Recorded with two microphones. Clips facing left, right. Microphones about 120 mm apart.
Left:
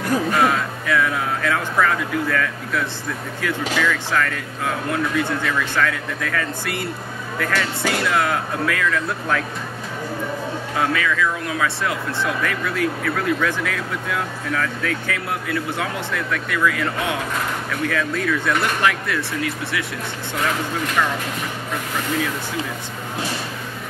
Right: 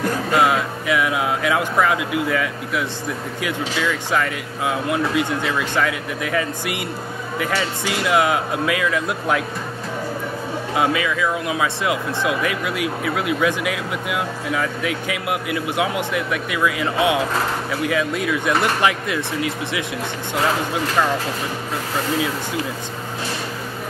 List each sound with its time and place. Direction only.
0.3 s music: 15° right (ahead or behind)
3.4 s speech: 15° right (ahead or behind)
10.8 s speech: 15° right (ahead or behind)
20.3 s speech: 30° right (ahead or behind)